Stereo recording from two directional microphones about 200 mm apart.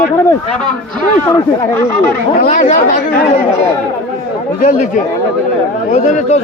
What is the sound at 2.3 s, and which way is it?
Speech, 45° left (ahead or behind).